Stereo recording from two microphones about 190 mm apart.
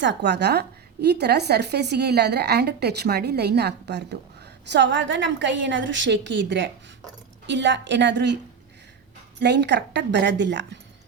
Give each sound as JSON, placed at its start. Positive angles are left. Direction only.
{"t": 0.0, "sound": "a woman's voice", "side_deg": -65}
{"t": 9.4, "sound": "a woman's voice", "side_deg": -65}